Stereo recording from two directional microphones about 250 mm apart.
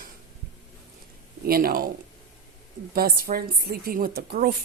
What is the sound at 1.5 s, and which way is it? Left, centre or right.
Speech, right.